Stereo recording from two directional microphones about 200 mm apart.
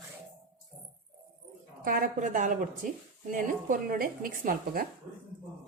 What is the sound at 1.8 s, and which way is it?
A woman's voice, 45° right (ahead or behind).